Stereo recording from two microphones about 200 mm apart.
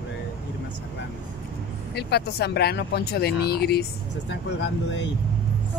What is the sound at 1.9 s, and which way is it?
Speech, 55° left (ahead or behind).